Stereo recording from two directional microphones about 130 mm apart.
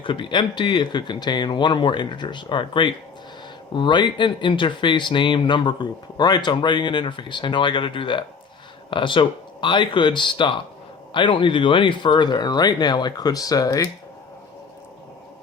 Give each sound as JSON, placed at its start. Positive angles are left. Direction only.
{"t": 0.0, "sound": "speech", "side_deg": 40}